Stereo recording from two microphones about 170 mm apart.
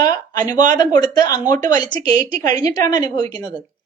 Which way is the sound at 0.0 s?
20° left (ahead or behind).